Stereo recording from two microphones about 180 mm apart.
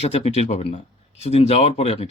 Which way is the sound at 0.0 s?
35° left (ahead or behind).